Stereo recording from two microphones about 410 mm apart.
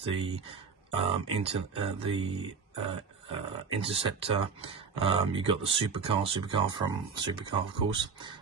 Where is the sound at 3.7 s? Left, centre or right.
Centre.